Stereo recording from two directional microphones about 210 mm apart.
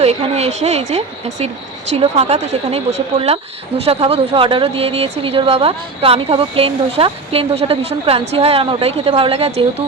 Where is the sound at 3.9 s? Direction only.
30° right (ahead or behind).